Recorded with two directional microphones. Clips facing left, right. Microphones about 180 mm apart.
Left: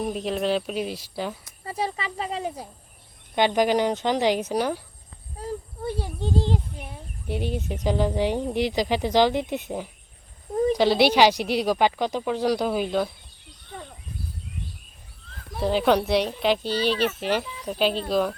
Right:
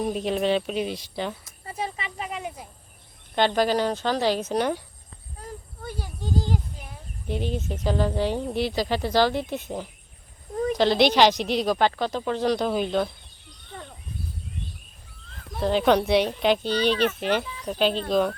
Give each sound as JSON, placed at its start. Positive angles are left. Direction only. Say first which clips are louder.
{"t": 0.0, "sound": "speech", "louder": "right 1 dB", "side_deg": 0}
{"t": 1.6, "sound": "speech", "louder": "left 3 dB", "side_deg": 35}
{"t": 3.3, "sound": "speech", "louder": "left 1 dB", "side_deg": 15}
{"t": 5.4, "sound": "a sound", "louder": "left 8 dB", "side_deg": 25}
{"t": 7.3, "sound": "speech", "louder": "even", "side_deg": 10}
{"t": 15.5, "sound": "speech", "louder": "even", "side_deg": 5}